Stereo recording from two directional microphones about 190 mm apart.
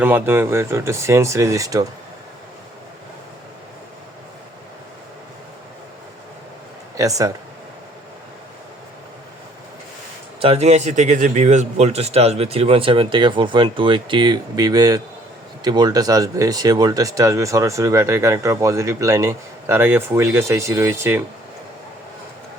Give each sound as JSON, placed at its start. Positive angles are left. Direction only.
{"t": 0.0, "sound": "speech", "side_deg": -10}
{"t": 6.9, "sound": "speech", "side_deg": -15}
{"t": 10.4, "sound": "a man's voice", "side_deg": -35}